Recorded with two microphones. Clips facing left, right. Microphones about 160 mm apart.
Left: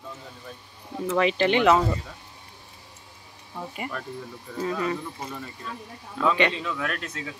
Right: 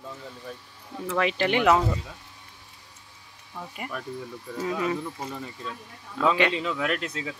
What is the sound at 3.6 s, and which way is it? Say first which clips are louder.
Speech: left 3 dB; 15° left (ahead or behind).